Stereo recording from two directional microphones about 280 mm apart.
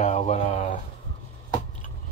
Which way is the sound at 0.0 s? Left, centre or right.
Left.